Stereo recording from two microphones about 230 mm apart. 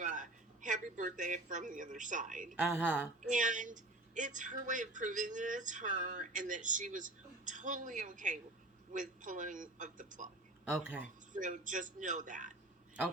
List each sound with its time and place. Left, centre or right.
0.0 s speech: right
2.6 s a woman's voice: centre
3.2 s speech: right
10.8 s speech: centre
11.3 s speech: right